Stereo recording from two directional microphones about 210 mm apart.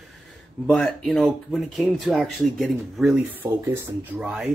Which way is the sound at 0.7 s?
Centre (ahead or behind).